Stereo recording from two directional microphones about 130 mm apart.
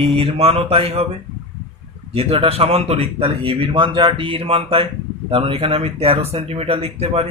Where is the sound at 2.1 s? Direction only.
50° right (ahead or behind).